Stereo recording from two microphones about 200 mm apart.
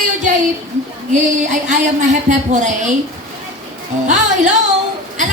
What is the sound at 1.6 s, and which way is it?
A woman's voice, 40° right (ahead or behind).